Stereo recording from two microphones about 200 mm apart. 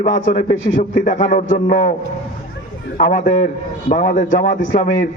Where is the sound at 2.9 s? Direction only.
40° left (ahead or behind).